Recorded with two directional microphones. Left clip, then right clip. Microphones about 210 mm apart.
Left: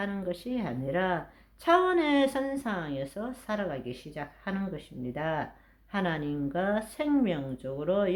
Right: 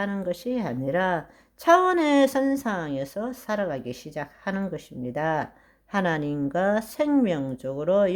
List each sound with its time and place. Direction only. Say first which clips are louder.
0.0 s speech: right 6 dB; 40° right (ahead or behind)